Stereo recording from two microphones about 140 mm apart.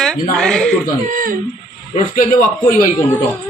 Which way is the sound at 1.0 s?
75° right (ahead or behind).